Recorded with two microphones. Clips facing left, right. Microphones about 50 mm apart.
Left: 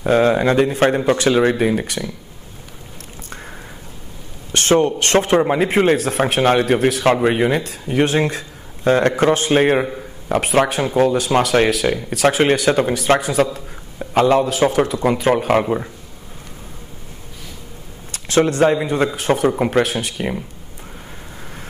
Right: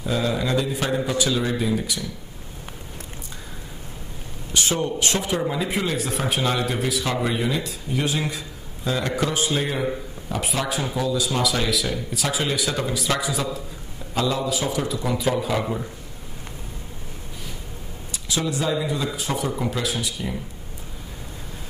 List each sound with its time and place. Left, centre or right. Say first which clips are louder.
0.0 s speech: left 10 dB; left
4.5 s speech: left 9 dB; left
18.1 s speech: left 10 dB; left